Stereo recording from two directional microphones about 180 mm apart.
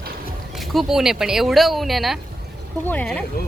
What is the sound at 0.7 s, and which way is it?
Speech, centre (ahead or behind).